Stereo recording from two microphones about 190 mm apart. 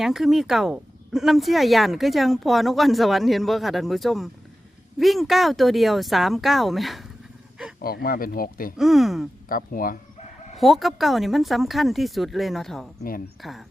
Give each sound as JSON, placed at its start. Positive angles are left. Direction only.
{"t": 0.0, "sound": "speech", "side_deg": 0}
{"t": 7.8, "sound": "speech", "side_deg": 50}
{"t": 8.8, "sound": "speech", "side_deg": 0}
{"t": 9.5, "sound": "speech", "side_deg": 50}
{"t": 10.6, "sound": "speech", "side_deg": 0}
{"t": 13.0, "sound": "speech", "side_deg": 50}
{"t": 13.4, "sound": "speech", "side_deg": 0}